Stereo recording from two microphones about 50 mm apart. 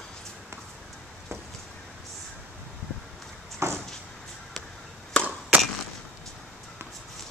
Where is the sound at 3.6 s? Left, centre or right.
Right.